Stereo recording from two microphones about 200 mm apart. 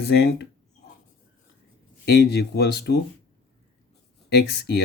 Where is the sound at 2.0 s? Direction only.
55° left (ahead or behind).